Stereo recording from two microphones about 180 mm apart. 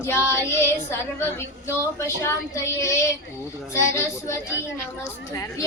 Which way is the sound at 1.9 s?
15° left (ahead or behind).